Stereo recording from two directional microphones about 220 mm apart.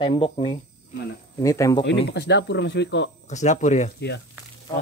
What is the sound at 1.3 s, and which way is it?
Speech, 15° left (ahead or behind).